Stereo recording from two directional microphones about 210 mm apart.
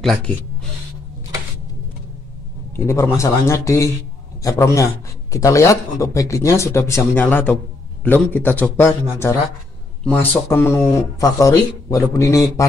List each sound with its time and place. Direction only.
0.0 s speech: centre (ahead or behind)
2.7 s speech: 15° left (ahead or behind)